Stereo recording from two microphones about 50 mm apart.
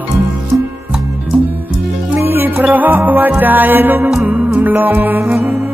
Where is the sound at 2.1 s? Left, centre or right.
Right.